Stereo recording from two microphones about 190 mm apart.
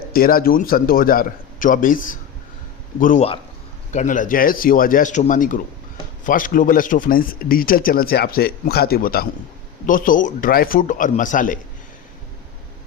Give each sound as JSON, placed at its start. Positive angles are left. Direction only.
{"t": 0.1, "sound": "speech", "side_deg": 50}